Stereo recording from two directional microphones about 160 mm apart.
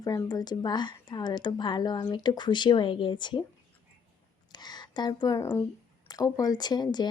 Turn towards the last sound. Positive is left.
turn(degrees=25)  # may be behind; listen again after turning